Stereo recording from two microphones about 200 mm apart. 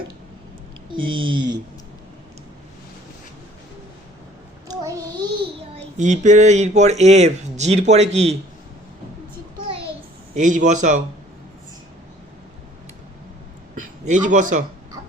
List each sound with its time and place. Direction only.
0.9 s speech: 80° right
4.7 s child singing: 20° right (ahead or behind)
5.7 s speech: 35° right (ahead or behind)
10.3 s speech: 40° right (ahead or behind)
13.7 s a man's voice: 40° right (ahead or behind)